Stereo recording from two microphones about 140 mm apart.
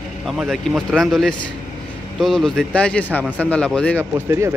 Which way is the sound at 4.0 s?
20° right (ahead or behind).